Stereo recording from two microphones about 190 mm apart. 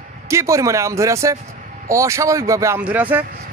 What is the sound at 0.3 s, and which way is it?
A man's voice, 15° right (ahead or behind).